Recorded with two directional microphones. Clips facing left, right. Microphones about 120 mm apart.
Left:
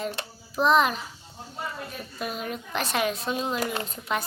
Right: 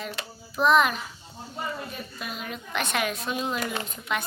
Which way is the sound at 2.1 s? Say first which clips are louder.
Left 7 dB; 40° left (ahead or behind).